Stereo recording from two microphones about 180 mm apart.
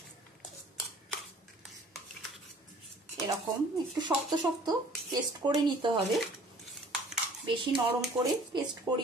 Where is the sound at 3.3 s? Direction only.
20° right (ahead or behind).